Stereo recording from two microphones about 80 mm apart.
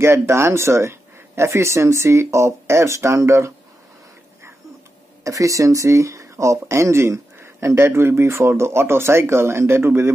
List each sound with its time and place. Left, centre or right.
0.0 s speech: right
5.2 s speech: right